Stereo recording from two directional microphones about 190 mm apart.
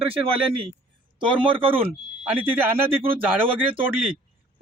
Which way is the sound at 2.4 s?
10° right (ahead or behind).